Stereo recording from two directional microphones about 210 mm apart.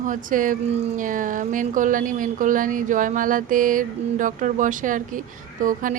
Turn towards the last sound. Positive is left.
turn(degrees=-40)  # may be behind; listen again after turning